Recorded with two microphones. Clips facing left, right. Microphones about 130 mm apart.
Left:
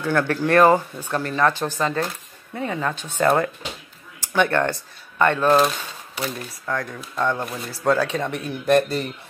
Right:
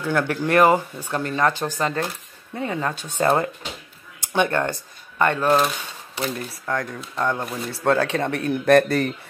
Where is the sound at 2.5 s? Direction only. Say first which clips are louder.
Even; 35° right (ahead or behind).